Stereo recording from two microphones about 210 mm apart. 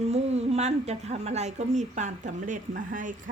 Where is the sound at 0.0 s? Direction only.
30° right (ahead or behind).